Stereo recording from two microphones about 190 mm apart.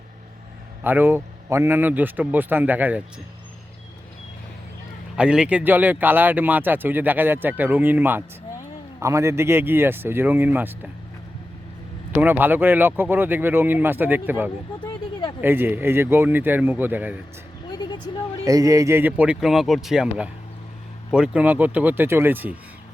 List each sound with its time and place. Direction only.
0.9 s speech: 10° right (ahead or behind)
5.1 s speech: 5° right (ahead or behind)
12.1 s speech: 10° right (ahead or behind)
17.7 s vehicle: 20° left (ahead or behind)
18.4 s speech: 20° right (ahead or behind)